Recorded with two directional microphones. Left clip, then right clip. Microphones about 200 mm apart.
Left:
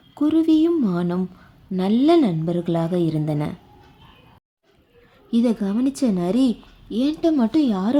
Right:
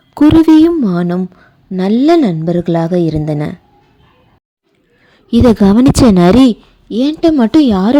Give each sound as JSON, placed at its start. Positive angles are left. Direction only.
{"t": 0.1, "sound": "a woman's voice", "side_deg": -45}
{"t": 5.3, "sound": "a woman's voice", "side_deg": -45}